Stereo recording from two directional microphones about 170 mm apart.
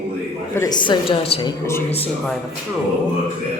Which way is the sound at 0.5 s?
20° left (ahead or behind).